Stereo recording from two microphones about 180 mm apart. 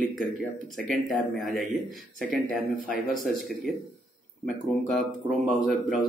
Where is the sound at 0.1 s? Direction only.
Centre (ahead or behind).